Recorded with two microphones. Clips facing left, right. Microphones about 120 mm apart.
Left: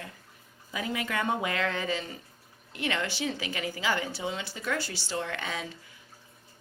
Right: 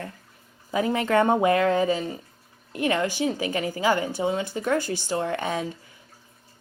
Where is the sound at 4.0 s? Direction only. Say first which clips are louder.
Right 8 dB; 20° right (ahead or behind).